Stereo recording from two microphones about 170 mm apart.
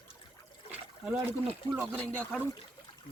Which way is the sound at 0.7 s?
10° right (ahead or behind).